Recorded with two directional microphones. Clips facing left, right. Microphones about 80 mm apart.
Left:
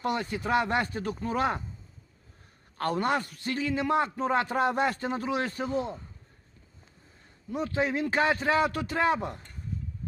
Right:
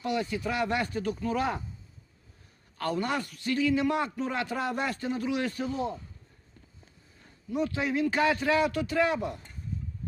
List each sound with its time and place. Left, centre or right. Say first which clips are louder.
0.0 s a man's voice: even; left
2.7 s a man's voice: left 2 dB; left
7.5 s a man's voice: even; left